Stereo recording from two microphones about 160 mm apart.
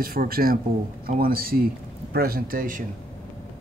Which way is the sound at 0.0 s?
65° right (ahead or behind).